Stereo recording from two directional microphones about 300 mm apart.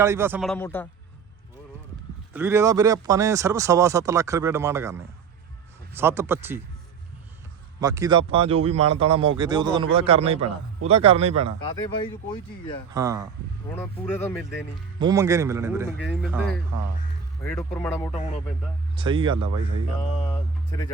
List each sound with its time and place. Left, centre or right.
0.0 s a man's voice: centre
2.3 s speech: centre
6.0 s speech: centre
7.8 s a man's voice: centre
12.9 s speech: centre
13.7 s speech: centre
14.9 s speech: centre
17.4 s speech: centre
18.1 s speech: left
18.9 s speech: centre
20.1 s speech: centre